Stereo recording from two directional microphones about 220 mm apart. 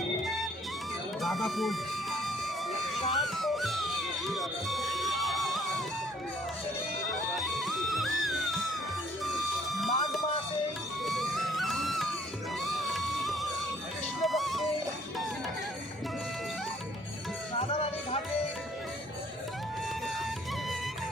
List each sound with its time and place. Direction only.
1.2 s music: centre (ahead or behind)
7.0 s music: centre (ahead or behind)
17.6 s a sound: 25° left (ahead or behind)